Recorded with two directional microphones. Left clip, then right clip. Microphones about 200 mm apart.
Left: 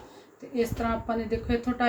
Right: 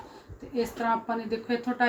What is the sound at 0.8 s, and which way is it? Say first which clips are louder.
Speech: right 1 dB; 30° left (ahead or behind).